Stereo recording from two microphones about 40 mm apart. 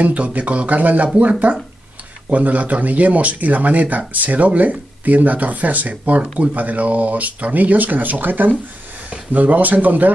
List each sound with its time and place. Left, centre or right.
0.0 s speech: right
9.1 s speech: right